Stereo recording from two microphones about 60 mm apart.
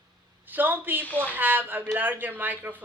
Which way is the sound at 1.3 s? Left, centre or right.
Right.